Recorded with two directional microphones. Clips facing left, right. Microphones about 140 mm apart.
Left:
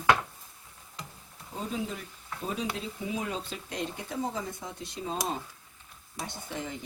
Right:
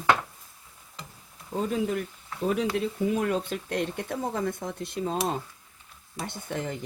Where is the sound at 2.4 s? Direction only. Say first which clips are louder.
Right 8 dB; 65° right (ahead or behind).